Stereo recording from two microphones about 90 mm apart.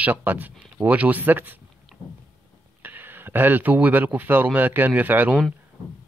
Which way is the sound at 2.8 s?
20° right (ahead or behind).